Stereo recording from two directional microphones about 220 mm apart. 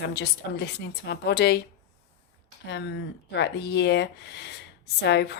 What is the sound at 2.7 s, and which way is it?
Speech, 50° left (ahead or behind).